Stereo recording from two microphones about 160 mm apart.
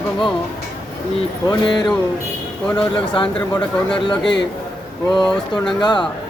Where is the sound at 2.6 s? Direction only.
5° left (ahead or behind).